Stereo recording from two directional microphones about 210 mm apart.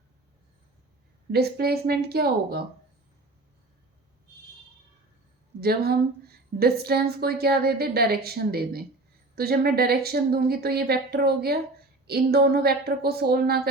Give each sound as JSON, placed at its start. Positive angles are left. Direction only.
{"t": 1.3, "sound": "a woman's voice", "side_deg": -50}
{"t": 5.5, "sound": "a woman's voice", "side_deg": -50}